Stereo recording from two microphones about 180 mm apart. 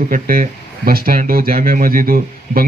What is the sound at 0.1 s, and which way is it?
A man's voice, 50° right (ahead or behind).